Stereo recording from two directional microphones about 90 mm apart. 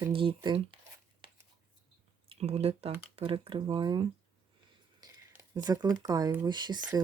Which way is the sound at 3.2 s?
70° right (ahead or behind).